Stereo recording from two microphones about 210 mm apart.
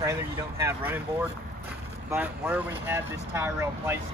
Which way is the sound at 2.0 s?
10° right (ahead or behind).